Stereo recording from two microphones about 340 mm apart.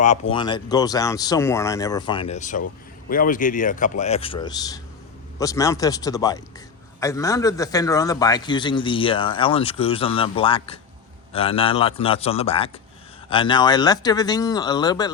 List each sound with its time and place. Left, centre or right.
0.0 s a man's voice: centre